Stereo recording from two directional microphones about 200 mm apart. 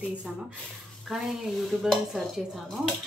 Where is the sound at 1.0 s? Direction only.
Centre (ahead or behind).